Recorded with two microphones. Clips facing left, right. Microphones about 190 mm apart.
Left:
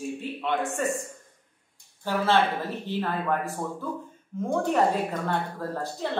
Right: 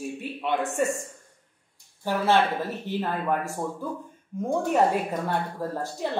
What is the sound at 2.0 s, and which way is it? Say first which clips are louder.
A man's voice: right 1 dB; 15° right (ahead or behind).